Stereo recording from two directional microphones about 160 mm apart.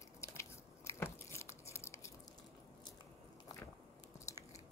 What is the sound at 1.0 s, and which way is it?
Biting, 15° left (ahead or behind).